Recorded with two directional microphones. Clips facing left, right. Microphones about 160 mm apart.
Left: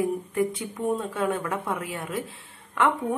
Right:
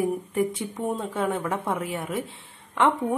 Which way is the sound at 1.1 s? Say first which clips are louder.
Right 1 dB; 25° right (ahead or behind).